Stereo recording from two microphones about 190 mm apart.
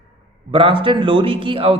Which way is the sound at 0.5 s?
25° right (ahead or behind).